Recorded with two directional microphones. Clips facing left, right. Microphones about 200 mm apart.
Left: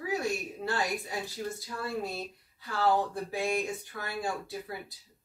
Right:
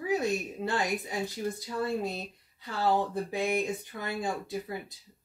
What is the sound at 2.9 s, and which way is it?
A woman's voice, 20° right (ahead or behind).